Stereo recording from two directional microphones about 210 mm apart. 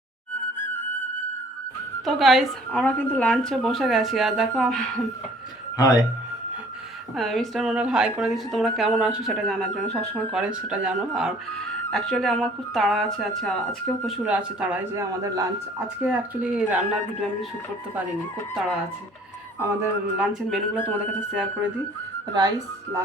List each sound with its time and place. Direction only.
0.6 s music: 10° left (ahead or behind)
2.0 s speech: centre (ahead or behind)
5.7 s speech: 15° left (ahead or behind)
7.2 s speech: centre (ahead or behind)
19.5 s a man's voice: 10° right (ahead or behind)
22.4 s a man's voice: 20° right (ahead or behind)